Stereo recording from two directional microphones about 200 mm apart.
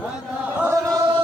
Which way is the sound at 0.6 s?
15° right (ahead or behind).